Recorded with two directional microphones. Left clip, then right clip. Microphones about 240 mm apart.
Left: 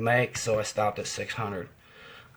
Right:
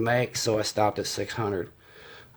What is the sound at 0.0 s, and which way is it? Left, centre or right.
Speech, right.